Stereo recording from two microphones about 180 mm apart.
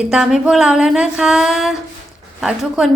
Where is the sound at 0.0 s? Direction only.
5° right (ahead or behind).